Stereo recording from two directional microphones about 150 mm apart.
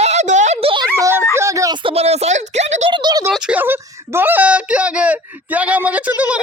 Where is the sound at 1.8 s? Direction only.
40° right (ahead or behind).